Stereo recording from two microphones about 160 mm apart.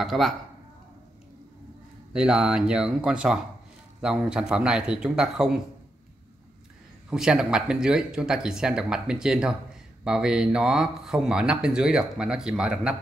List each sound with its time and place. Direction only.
0.0 s speech: centre (ahead or behind)
2.1 s speech: 5° right (ahead or behind)
7.1 s speech: 5° right (ahead or behind)